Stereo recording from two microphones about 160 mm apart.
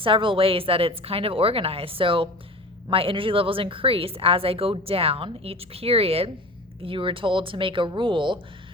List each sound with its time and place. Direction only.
0.0 s speech: 30° right (ahead or behind)